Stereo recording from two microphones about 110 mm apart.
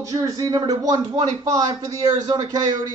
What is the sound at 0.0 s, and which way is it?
Speech, 30° right (ahead or behind).